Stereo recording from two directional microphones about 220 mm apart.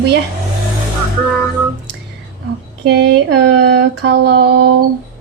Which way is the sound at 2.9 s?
50° right (ahead or behind).